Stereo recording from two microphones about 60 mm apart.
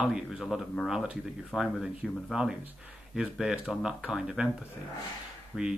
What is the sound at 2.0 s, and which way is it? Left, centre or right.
Speech, centre.